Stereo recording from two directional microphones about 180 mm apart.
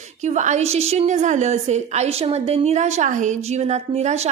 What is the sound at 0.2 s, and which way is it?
A woman's voice, 40° right (ahead or behind).